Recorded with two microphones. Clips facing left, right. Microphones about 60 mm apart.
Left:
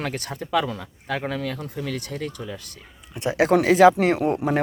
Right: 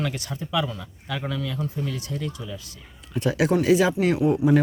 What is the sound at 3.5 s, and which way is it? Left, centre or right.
Speech, left.